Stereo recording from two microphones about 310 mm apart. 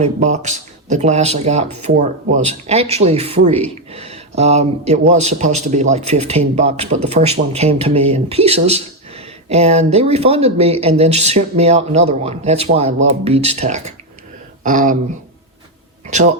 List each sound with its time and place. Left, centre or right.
0.0 s speech: right
16.0 s speech: right